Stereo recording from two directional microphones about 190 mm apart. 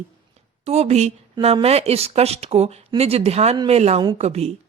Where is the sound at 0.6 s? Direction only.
35° right (ahead or behind).